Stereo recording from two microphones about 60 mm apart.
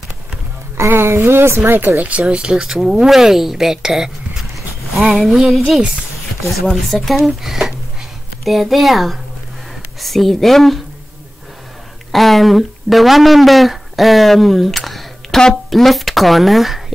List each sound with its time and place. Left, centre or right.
0.7 s a sound: right
1.6 s speech: right
2.0 s speech: right; by 5.8 s centre
6.9 s speech: centre
12.1 s speech: centre